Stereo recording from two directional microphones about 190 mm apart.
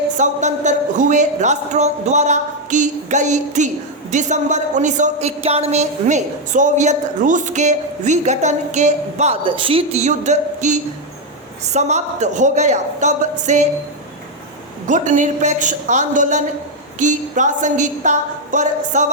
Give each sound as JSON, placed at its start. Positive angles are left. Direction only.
{"t": 0.2, "sound": "a woman's voice", "side_deg": -40}
{"t": 14.8, "sound": "a woman's voice", "side_deg": -40}